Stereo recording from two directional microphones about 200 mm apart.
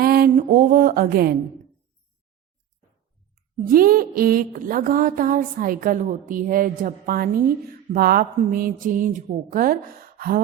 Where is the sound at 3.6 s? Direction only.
45° right (ahead or behind).